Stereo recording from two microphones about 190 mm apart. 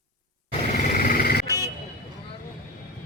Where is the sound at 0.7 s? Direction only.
45° left (ahead or behind).